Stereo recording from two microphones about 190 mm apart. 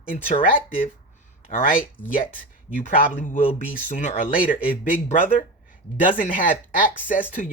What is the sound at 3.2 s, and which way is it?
Speech, 40° left (ahead or behind).